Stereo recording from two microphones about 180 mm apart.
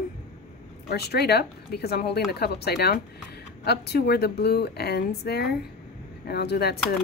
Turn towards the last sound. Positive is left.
turn(degrees=65)  # may be behind; listen again after turning